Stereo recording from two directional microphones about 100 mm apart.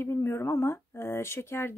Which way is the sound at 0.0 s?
25° left (ahead or behind).